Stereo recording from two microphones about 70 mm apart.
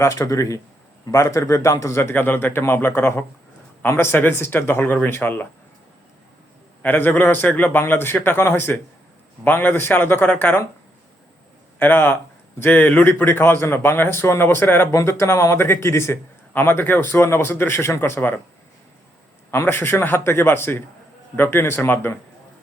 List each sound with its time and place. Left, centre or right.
0.0 s a man's voice: left
6.8 s a man's voice: left
11.8 s speech: left
14.9 s speech: left
19.5 s speech: left